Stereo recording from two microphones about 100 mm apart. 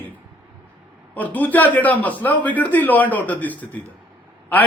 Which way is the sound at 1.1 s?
15° left (ahead or behind).